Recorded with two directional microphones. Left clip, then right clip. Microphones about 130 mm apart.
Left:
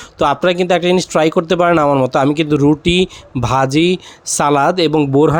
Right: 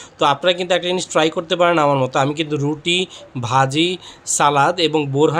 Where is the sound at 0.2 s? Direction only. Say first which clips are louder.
Left 2 dB; 65° left (ahead or behind).